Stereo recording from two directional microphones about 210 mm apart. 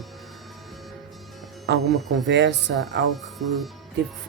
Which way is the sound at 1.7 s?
60° right (ahead or behind).